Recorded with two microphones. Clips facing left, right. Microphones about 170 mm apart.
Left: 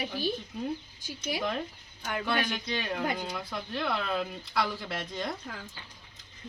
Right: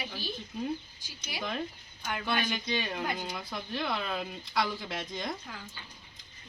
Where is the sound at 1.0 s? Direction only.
50° left (ahead or behind).